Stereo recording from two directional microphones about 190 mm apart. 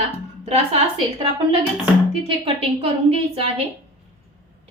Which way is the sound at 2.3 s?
30° right (ahead or behind).